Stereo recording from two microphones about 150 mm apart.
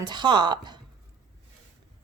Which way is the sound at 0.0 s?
30° right (ahead or behind).